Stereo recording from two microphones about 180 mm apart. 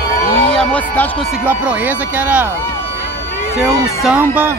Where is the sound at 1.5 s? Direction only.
10° right (ahead or behind).